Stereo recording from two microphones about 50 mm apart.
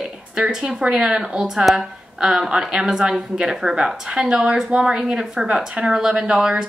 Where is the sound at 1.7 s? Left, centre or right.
Centre.